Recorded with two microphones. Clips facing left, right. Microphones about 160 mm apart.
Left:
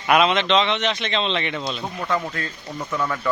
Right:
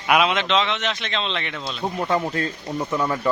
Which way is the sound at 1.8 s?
25° right (ahead or behind).